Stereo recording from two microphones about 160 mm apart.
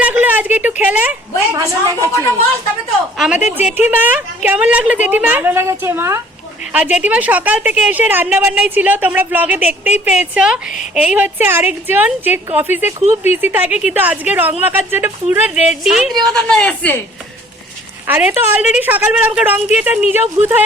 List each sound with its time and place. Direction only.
0.0 s a sound: 10° right (ahead or behind)
1.5 s a woman's voice: 20° right (ahead or behind)
3.2 s a woman's voice: 5° right (ahead or behind)
18.0 s a woman's voice: 15° right (ahead or behind)